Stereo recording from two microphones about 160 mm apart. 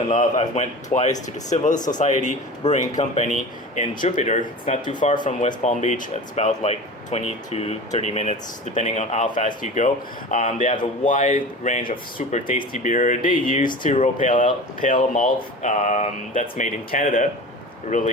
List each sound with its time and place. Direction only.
0.1 s speech: 50° left (ahead or behind)